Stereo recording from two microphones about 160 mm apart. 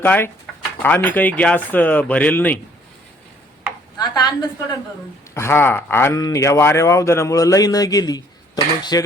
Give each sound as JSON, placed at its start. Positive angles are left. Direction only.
{"t": 0.0, "sound": "speech", "side_deg": 10}
{"t": 3.9, "sound": "a woman's voice", "side_deg": 25}